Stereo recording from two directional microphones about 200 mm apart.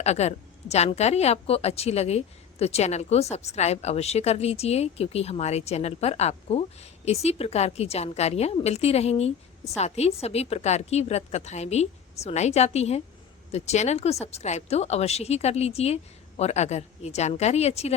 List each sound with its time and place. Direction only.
0.0 s a woman's voice: 35° left (ahead or behind)